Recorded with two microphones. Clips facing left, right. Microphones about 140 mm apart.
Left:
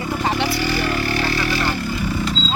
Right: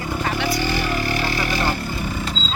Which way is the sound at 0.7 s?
20° right (ahead or behind).